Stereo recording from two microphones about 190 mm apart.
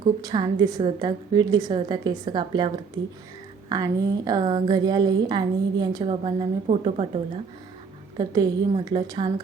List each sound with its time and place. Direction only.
0.2 s a woman's voice: 20° right (ahead or behind)
8.2 s a woman's voice: 20° right (ahead or behind)